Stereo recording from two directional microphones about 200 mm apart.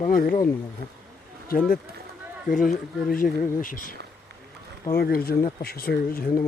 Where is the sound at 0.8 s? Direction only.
50° right (ahead or behind).